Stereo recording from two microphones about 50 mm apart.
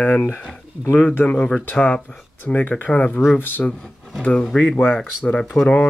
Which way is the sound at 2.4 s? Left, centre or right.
Left.